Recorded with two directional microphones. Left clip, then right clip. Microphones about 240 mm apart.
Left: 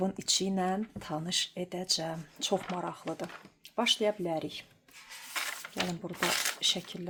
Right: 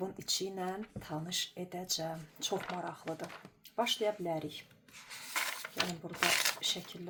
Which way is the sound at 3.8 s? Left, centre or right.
Left.